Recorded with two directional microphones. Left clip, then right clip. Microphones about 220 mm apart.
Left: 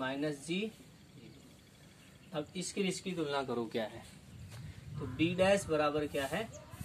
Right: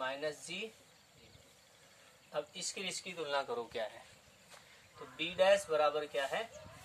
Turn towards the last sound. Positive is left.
turn(degrees=0)  # may be behind; listen again after turning